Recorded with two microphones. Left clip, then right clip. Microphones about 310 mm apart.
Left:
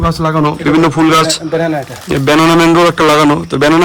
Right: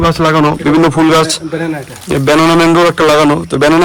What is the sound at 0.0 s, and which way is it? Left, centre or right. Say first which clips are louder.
A man's voice: right 3 dB; centre.